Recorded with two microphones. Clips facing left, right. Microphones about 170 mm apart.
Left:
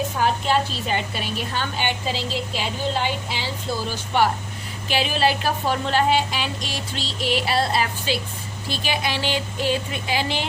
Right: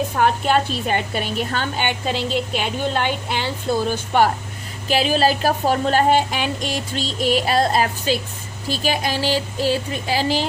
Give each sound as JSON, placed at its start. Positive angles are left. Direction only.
{"t": 0.2, "sound": "a woman's voice", "side_deg": -55}
{"t": 4.9, "sound": "a sound", "side_deg": -40}
{"t": 8.6, "sound": "speech", "side_deg": -40}